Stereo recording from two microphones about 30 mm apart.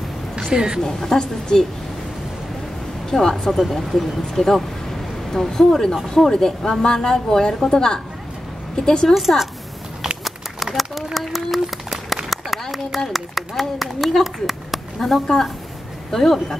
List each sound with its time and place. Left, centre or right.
0.5 s a woman's voice: right
0.8 s a woman's voice: centre
3.1 s a woman's voice: centre
10.2 s a sound: centre
11.1 s a woman's voice: centre
12.3 s a sound: centre
13.1 s a woman's voice: centre
15.0 s a woman's voice: centre